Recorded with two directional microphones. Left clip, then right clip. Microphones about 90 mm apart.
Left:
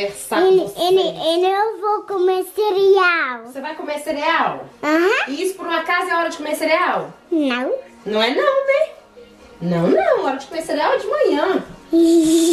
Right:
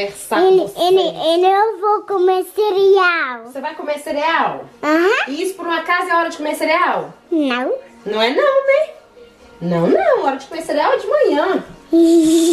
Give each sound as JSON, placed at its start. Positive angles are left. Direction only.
{"t": 0.0, "sound": "a child's voice", "side_deg": -20}
{"t": 3.5, "sound": "a child's voice", "side_deg": -25}